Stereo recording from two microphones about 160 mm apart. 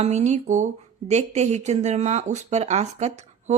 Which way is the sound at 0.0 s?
45° right (ahead or behind).